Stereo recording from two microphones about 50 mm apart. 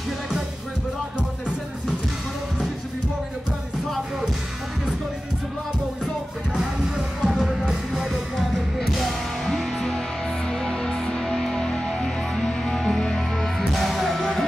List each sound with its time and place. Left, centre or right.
6.5 s music: centre